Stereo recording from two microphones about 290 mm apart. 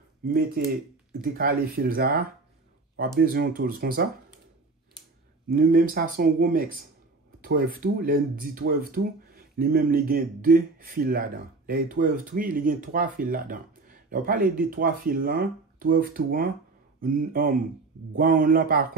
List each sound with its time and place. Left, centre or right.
0.6 s speech: right
5.6 s speech: right